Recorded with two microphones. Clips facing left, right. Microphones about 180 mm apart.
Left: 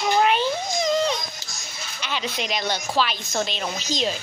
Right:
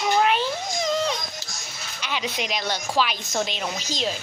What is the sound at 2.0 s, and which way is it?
A child's voice, 10° right (ahead or behind).